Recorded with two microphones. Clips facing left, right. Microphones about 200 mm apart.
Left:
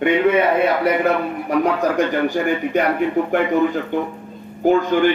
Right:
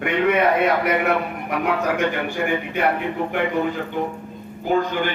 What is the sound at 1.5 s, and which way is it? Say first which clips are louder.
Speech: left 4 dB; 35° left (ahead or behind).